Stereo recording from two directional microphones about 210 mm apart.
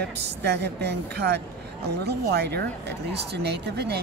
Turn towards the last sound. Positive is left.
turn(degrees=-50)  # may be behind; listen again after turning